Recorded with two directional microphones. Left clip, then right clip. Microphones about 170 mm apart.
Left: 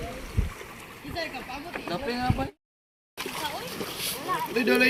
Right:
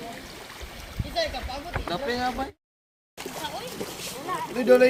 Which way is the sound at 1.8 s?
25° left (ahead or behind).